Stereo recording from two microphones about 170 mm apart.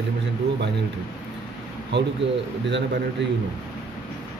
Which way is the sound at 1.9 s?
90° right.